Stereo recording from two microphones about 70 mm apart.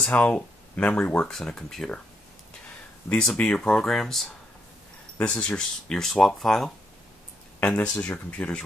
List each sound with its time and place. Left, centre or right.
0.0 s speech: centre
1.3 s speech: centre
3.1 s speech: centre
5.2 s speech: centre
8.0 s speech: centre